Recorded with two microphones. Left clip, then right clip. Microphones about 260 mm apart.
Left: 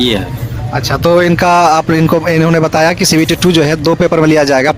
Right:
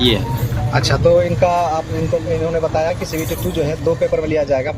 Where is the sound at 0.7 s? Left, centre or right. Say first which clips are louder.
Left 2 dB; centre.